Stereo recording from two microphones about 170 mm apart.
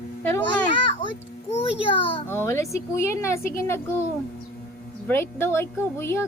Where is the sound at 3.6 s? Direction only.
15° left (ahead or behind).